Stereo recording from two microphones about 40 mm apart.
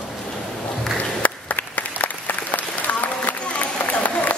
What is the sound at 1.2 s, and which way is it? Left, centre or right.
Applause, left.